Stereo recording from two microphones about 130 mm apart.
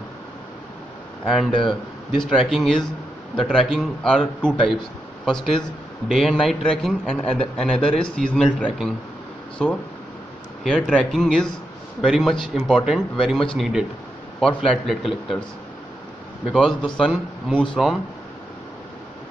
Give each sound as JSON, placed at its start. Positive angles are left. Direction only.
{"t": 1.2, "sound": "speech", "side_deg": 0}
{"t": 16.5, "sound": "speech", "side_deg": 5}